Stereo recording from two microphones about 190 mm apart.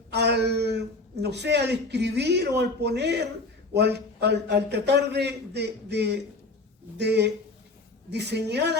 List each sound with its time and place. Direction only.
0.1 s a man's voice: 60° right (ahead or behind)